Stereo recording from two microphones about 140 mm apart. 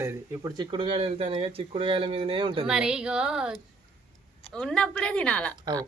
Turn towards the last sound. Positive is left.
turn(degrees=10)  # may be behind; listen again after turning